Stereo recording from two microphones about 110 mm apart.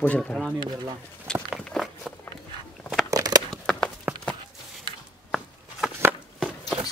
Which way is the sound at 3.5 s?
5° left (ahead or behind).